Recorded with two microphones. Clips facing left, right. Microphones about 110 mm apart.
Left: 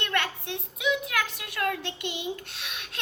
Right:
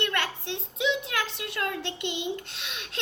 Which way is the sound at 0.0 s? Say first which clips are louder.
Even; 25° right (ahead or behind).